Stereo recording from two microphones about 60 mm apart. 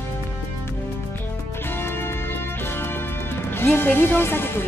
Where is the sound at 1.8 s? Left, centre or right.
Left.